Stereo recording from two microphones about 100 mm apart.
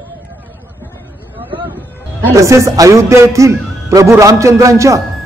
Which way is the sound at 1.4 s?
55° right (ahead or behind).